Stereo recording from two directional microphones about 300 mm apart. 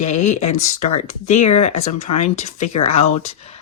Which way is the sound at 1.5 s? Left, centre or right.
Left.